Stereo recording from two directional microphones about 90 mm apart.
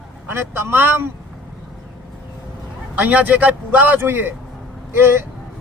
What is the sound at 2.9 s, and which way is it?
A man's voice, 15° right (ahead or behind).